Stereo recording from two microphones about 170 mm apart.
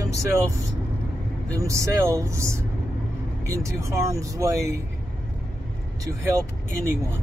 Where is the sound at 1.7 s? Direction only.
20° right (ahead or behind).